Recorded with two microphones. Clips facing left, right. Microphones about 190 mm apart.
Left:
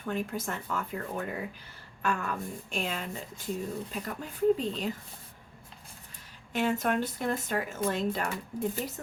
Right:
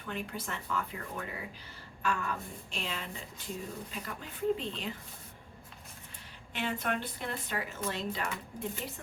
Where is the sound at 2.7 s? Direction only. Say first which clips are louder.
Left 5 dB; 50° left (ahead or behind).